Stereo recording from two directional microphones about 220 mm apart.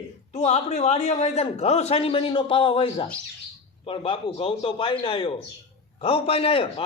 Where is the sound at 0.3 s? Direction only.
30° left (ahead or behind).